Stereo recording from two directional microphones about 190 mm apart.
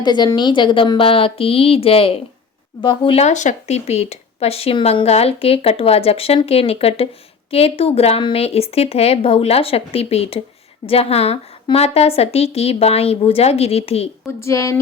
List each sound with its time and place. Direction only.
0.0 s a woman's voice: 20° left (ahead or behind)
14.3 s a woman's voice: 15° left (ahead or behind)